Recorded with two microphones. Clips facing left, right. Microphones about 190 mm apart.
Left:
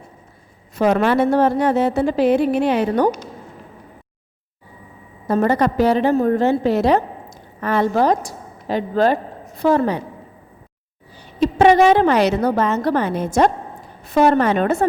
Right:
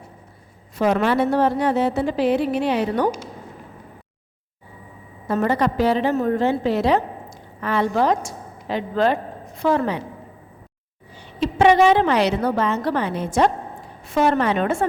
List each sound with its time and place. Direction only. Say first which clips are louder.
0.8 s a woman's voice: left 3 dB; 45° left (ahead or behind)
5.3 s a woman's voice: left 3 dB; 45° left (ahead or behind)
11.3 s a woman's voice: left 3 dB; 45° left (ahead or behind)